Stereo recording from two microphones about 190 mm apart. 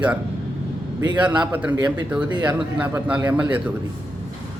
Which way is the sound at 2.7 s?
10° right (ahead or behind).